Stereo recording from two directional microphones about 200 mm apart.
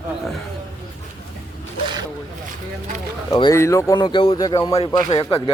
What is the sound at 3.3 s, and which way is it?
Speech, 20° left (ahead or behind).